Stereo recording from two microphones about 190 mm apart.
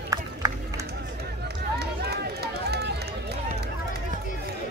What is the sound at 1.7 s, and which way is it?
Run, 60° right (ahead or behind).